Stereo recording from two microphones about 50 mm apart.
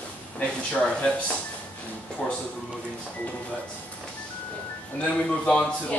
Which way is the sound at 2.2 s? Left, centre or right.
Centre.